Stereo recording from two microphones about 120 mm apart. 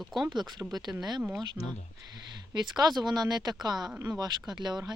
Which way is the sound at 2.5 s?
35° right (ahead or behind).